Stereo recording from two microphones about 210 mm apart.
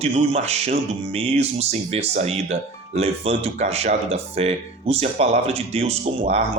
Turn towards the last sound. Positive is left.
turn(degrees=-30)  # may be behind; listen again after turning